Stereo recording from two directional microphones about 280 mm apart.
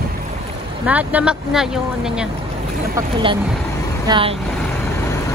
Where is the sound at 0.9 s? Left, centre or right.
Centre.